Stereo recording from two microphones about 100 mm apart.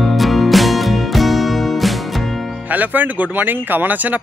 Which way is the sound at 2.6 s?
15° right (ahead or behind).